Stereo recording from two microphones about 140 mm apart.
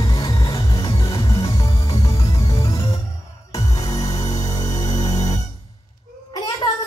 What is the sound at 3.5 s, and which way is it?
Music, 25° left (ahead or behind).